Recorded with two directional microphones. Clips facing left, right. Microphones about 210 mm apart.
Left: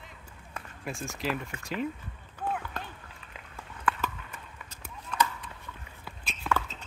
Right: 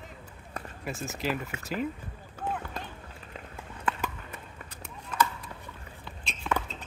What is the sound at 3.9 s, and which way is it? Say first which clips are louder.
Clip-clop: left 1 dB; 25° right (ahead or behind).